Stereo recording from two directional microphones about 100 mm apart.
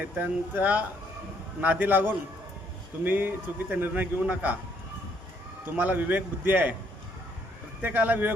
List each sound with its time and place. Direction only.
0.2 s a man's voice: 15° right (ahead or behind)
5.7 s a man's voice: 20° right (ahead or behind)
7.8 s speech: 15° right (ahead or behind)